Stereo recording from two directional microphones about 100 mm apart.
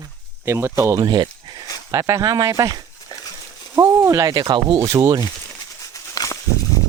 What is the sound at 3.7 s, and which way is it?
Speech, 30° right (ahead or behind).